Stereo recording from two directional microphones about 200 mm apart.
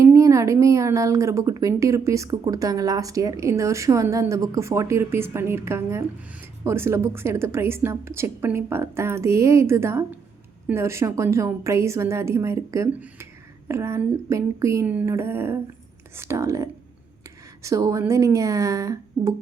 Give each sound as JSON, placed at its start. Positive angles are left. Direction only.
{"t": 0.0, "sound": "a woman's voice", "side_deg": -15}